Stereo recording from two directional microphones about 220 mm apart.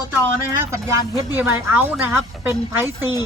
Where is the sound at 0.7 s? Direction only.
15° right (ahead or behind).